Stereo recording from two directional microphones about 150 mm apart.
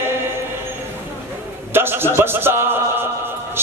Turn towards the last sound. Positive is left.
turn(degrees=-15)  # may be behind; listen again after turning